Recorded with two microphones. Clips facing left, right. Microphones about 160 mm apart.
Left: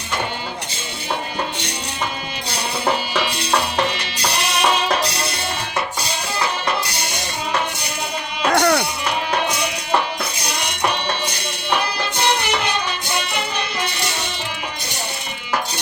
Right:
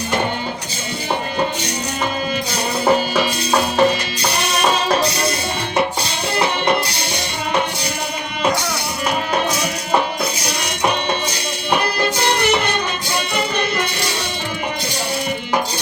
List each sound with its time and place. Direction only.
3.2 s music: 10° right (ahead or behind)
8.5 s music: 60° left (ahead or behind)